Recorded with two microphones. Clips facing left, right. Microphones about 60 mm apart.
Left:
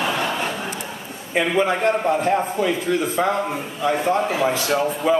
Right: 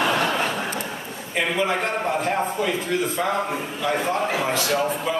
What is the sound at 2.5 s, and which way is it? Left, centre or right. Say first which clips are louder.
A man's voice: left 3 dB; centre.